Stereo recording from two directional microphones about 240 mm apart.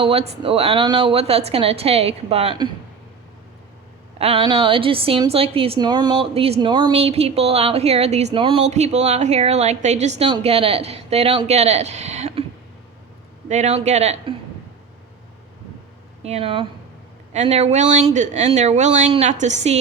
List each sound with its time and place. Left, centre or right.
0.0 s a woman's voice: right
4.2 s a woman's voice: right
13.5 s a woman's voice: right
16.2 s a woman's voice: right